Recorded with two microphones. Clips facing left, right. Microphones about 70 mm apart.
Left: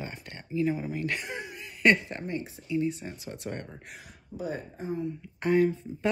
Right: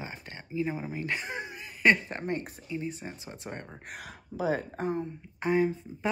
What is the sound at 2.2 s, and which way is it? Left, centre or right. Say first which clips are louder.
Speech: right 1 dB; right.